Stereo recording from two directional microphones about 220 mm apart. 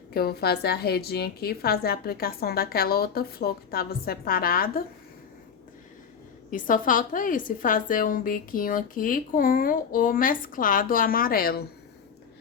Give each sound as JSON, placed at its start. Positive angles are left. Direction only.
{"t": 0.1, "sound": "a woman's voice", "side_deg": 45}
{"t": 6.5, "sound": "a woman's voice", "side_deg": 35}